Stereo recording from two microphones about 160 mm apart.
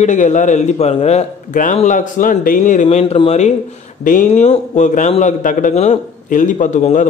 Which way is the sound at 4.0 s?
55° left (ahead or behind).